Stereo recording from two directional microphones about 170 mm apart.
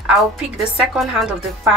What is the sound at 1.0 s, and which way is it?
Speech, 5° right (ahead or behind).